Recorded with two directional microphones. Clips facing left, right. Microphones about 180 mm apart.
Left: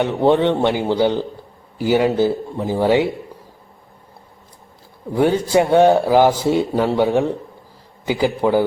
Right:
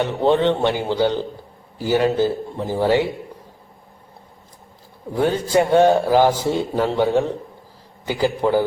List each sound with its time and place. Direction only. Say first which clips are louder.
0.0 s speech: left 2 dB; 15° left (ahead or behind)
5.1 s speech: left 2 dB; 15° left (ahead or behind)